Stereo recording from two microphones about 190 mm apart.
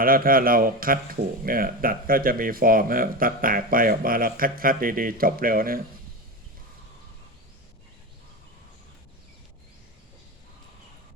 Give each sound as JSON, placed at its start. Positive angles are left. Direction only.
{"t": 0.0, "sound": "speech", "side_deg": -50}